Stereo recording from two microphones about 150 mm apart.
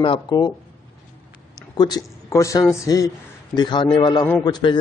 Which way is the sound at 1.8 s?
25° left (ahead or behind).